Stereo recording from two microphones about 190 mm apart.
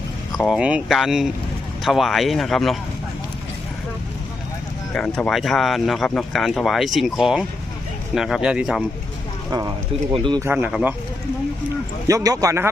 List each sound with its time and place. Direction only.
0.3 s speech: centre (ahead or behind)
4.9 s speech: 5° left (ahead or behind)
10.1 s speech: 25° right (ahead or behind)
10.4 s speech: 10° right (ahead or behind)
12.0 s speech: 15° right (ahead or behind)